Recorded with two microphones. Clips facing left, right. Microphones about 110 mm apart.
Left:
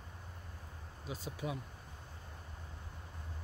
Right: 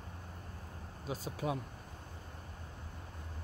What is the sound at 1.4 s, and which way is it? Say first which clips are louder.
Speech: right 4 dB; 40° right (ahead or behind).